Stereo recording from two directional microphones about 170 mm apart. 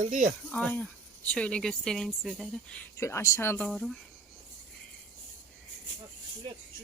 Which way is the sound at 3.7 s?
Centre (ahead or behind).